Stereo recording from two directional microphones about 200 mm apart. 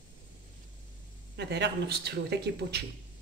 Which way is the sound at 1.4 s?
60° right (ahead or behind).